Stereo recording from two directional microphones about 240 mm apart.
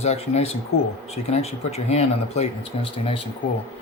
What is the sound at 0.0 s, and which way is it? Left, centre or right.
Speech, left.